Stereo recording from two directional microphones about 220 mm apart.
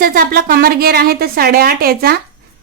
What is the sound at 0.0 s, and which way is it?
A woman's voice, 40° right (ahead or behind).